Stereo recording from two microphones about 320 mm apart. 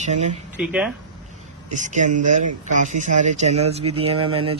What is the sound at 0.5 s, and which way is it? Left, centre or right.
Speech, centre.